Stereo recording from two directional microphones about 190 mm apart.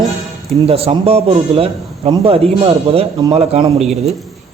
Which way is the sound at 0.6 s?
30° right (ahead or behind).